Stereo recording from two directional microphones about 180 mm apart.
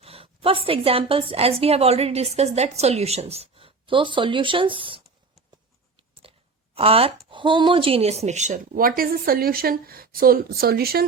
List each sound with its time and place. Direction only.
0.0 s a woman's voice: 30° right (ahead or behind)
6.7 s speech: 30° right (ahead or behind); by 11.0 s 60° right (ahead or behind)